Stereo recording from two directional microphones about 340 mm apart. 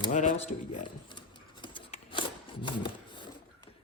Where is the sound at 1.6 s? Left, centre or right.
Centre.